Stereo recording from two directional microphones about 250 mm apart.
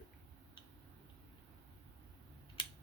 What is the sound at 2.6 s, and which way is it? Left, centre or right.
Scissors, centre.